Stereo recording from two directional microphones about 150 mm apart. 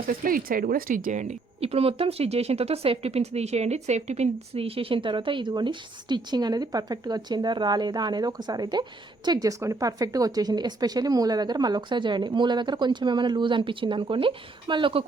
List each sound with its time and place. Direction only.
0.1 s speech: 70° right (ahead or behind); by 15.0 s 35° right (ahead or behind)